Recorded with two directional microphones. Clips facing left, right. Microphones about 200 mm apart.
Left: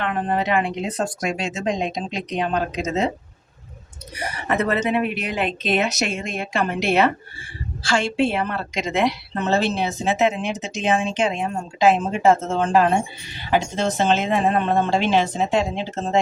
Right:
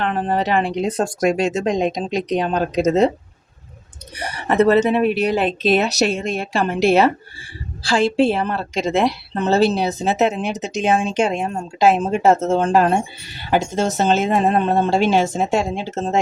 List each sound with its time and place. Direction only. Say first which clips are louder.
0.0 s a woman's voice: right 3 dB; 35° right (ahead or behind)
4.2 s a woman's voice: right 6 dB; 30° right (ahead or behind)
7.9 s a woman's voice: right 4 dB; 35° right (ahead or behind)